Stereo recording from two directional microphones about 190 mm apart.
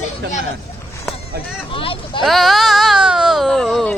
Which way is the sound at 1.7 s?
30° left (ahead or behind).